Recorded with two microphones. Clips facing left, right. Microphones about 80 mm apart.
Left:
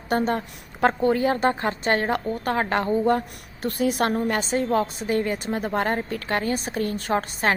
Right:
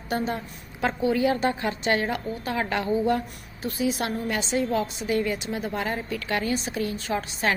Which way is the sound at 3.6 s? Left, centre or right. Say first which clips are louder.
Left 4 dB; left.